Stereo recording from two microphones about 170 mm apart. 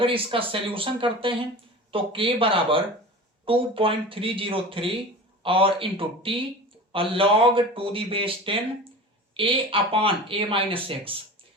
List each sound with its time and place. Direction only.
0.0 s speech: 30° right (ahead or behind)